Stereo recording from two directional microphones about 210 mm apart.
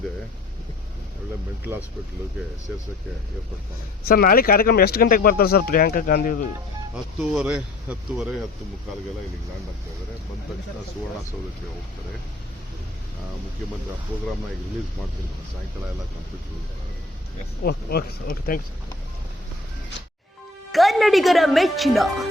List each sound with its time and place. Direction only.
4.1 s speech: 45° left (ahead or behind)
6.9 s a woman's voice: 5° right (ahead or behind)
17.6 s speech: 50° left (ahead or behind)
20.7 s a woman's voice: centre (ahead or behind)